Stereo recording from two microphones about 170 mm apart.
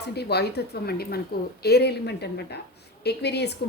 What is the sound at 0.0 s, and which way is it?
A woman's voice, 75° left (ahead or behind).